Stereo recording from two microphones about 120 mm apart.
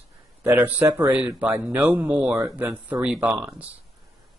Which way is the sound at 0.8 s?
25° right (ahead or behind).